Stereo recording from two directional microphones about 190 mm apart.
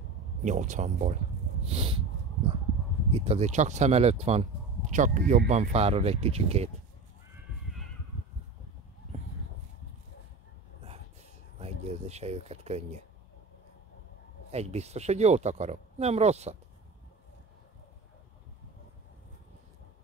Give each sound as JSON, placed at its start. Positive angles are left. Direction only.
{"t": 0.4, "sound": "speech", "side_deg": -40}
{"t": 1.7, "sound": "a sound", "side_deg": -30}
{"t": 3.1, "sound": "speech", "side_deg": -30}
{"t": 11.5, "sound": "speech", "side_deg": -35}
{"t": 14.5, "sound": "speech", "side_deg": -35}